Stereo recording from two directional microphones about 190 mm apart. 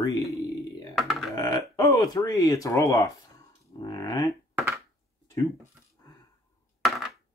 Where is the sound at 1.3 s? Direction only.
15° left (ahead or behind).